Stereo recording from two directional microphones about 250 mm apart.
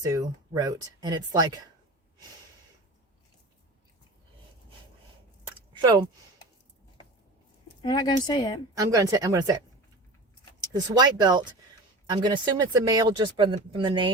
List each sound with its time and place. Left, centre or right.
0.0 s speech: centre
5.8 s speech: centre
7.8 s speech: centre
8.7 s speech: centre
10.7 s speech: centre